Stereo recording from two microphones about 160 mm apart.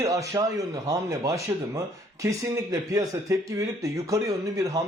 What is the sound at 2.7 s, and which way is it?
Speech, 20° right (ahead or behind).